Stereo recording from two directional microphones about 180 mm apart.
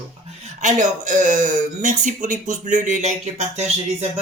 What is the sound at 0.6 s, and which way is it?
Speech, 40° right (ahead or behind).